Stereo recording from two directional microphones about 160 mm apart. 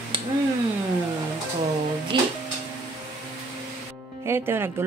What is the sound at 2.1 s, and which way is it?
Music, 30° right (ahead or behind).